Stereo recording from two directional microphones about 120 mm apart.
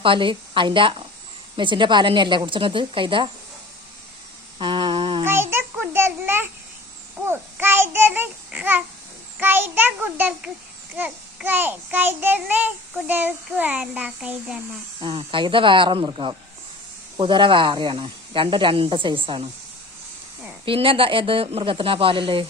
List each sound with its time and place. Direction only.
0.0 s speech: 45° right (ahead or behind)
4.5 s a sound: 40° right (ahead or behind)
5.2 s a child's voice: 20° right (ahead or behind)
15.0 s speech: 45° right (ahead or behind)
20.7 s speech: 50° right (ahead or behind)